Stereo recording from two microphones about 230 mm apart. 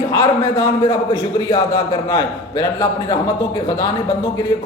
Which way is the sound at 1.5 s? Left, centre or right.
Centre.